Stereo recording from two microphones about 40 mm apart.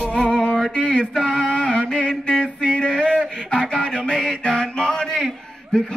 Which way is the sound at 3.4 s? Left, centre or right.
Left.